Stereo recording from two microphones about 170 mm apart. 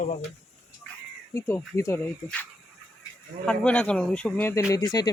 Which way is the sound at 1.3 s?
15° left (ahead or behind).